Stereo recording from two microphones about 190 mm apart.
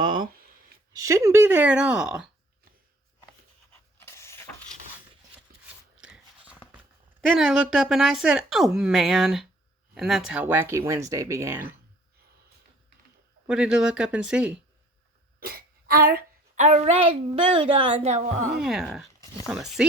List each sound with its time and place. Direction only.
0.9 s speech: 15° right (ahead or behind)
3.9 s a sound: 15° left (ahead or behind)
6.0 s a sound: 5° right (ahead or behind)
7.2 s speech: 5° right (ahead or behind)
13.5 s speech: 5° right (ahead or behind)
15.4 s speech: 50° right (ahead or behind); by 18.2 s 35° right (ahead or behind)
18.6 s speech: 5° right (ahead or behind)